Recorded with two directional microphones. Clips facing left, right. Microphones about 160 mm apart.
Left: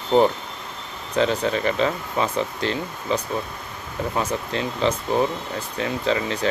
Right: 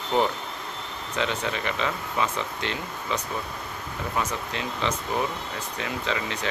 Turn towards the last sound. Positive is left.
turn(degrees=35)  # may be behind; listen again after turning